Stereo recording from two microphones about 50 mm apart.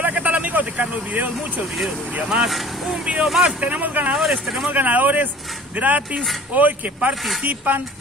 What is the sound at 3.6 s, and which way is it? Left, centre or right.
Speech, right.